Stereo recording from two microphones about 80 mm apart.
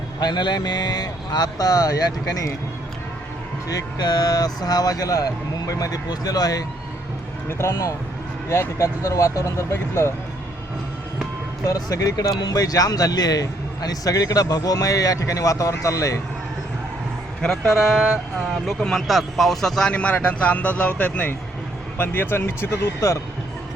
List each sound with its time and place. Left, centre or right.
0.2 s a man's voice: left
3.7 s speech: left
7.4 s speech: left
11.7 s speech: left
17.4 s speech: centre
17.7 s speech: centre; by 23.2 s left